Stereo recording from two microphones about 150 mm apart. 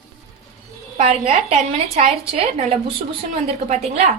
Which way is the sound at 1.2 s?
45° right (ahead or behind).